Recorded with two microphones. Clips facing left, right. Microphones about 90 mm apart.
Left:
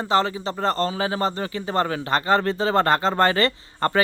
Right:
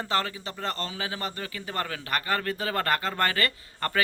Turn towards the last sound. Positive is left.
turn(degrees=30)  # may be behind; listen again after turning